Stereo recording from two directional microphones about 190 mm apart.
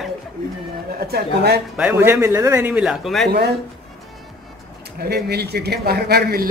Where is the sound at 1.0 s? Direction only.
55° right (ahead or behind).